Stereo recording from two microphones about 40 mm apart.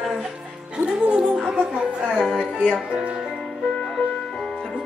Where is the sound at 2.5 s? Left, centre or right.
Right.